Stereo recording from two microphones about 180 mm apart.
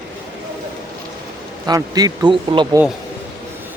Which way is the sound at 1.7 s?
20° right (ahead or behind).